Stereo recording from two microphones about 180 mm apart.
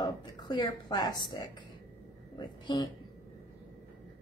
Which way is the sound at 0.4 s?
25° left (ahead or behind).